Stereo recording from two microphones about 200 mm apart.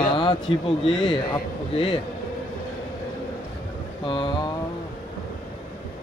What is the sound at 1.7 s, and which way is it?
Speech, 25° left (ahead or behind).